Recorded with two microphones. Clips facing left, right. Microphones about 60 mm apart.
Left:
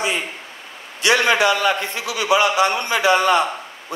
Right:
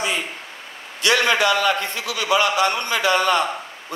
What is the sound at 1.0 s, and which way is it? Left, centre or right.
A man's voice, left.